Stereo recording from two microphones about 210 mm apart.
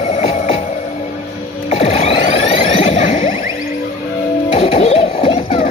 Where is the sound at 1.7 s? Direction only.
30° left (ahead or behind).